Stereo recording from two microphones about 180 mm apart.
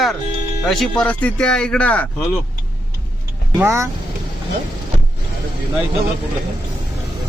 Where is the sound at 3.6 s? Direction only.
15° right (ahead or behind).